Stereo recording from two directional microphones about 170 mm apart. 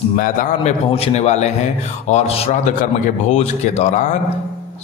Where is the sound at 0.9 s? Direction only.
40° left (ahead or behind).